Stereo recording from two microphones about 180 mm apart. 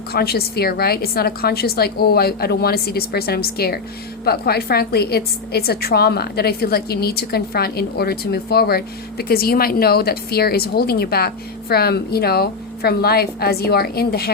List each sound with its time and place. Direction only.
0.1 s a woman's voice: 60° left (ahead or behind)